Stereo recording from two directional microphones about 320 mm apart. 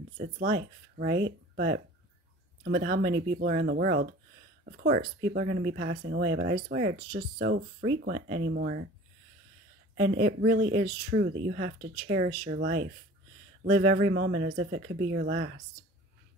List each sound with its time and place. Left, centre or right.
0.4 s speech: right
2.6 s speech: right
9.9 s speech: right
10.2 s speech: right